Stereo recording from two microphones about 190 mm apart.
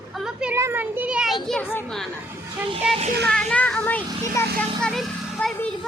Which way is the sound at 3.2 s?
5° left (ahead or behind).